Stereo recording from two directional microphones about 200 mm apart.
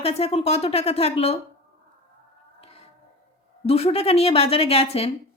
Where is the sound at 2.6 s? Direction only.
30° left (ahead or behind).